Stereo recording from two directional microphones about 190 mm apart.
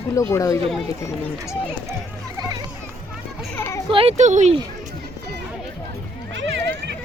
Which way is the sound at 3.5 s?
10° left (ahead or behind).